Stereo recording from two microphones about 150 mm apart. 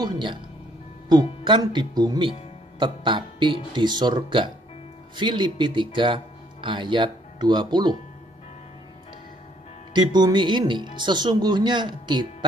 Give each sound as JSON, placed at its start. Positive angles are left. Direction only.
{"t": 0.0, "sound": "speech", "side_deg": -30}
{"t": 1.4, "sound": "speech", "side_deg": -30}
{"t": 9.9, "sound": "speech", "side_deg": -30}